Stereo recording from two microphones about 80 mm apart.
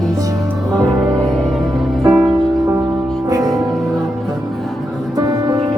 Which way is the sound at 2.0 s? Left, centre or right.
Right.